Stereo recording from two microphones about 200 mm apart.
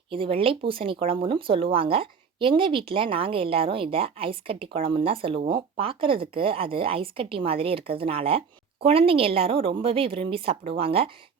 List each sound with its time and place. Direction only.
0.1 s speech: 25° right (ahead or behind)